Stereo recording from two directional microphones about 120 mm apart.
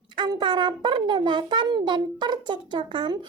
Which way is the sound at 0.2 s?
40° right (ahead or behind).